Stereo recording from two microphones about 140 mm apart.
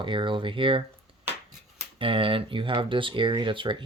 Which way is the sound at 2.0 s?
40° right (ahead or behind).